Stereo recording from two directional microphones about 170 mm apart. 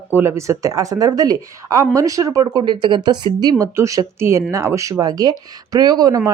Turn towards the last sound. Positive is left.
turn(degrees=-20)  # may be behind; listen again after turning